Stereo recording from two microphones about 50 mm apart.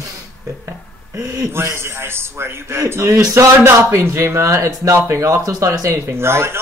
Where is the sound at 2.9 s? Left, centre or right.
Right.